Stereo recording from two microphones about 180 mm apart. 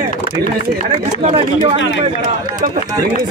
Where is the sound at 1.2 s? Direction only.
35° right (ahead or behind).